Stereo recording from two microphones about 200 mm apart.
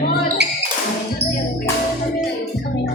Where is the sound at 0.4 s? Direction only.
60° right (ahead or behind).